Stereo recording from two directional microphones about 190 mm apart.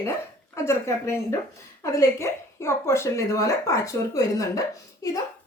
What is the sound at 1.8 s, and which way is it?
Speech, 15° left (ahead or behind).